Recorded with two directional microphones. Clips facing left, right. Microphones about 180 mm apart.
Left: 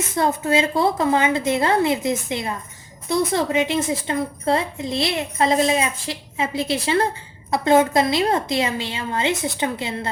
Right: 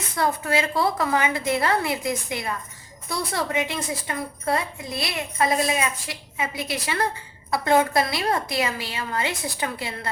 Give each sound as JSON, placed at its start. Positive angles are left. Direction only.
{"t": 0.2, "sound": "a woman's voice", "side_deg": 25}